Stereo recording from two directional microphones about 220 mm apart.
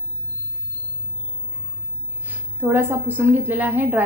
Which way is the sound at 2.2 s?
10° right (ahead or behind).